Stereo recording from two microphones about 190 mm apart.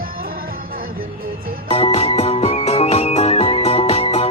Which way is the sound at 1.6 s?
30° left (ahead or behind).